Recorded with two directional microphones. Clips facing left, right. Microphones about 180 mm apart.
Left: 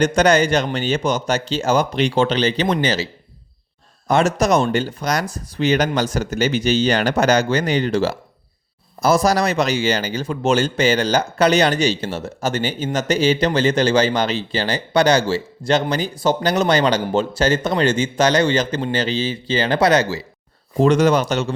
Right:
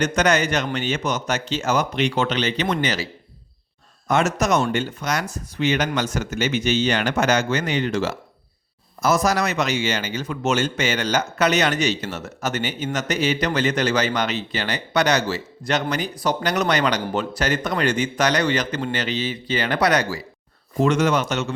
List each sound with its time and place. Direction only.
0.0 s a man's voice: 30° left (ahead or behind)
4.1 s a man's voice: 35° left (ahead or behind)